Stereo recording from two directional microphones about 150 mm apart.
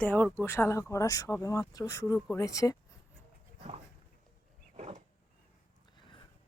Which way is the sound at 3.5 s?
40° right (ahead or behind).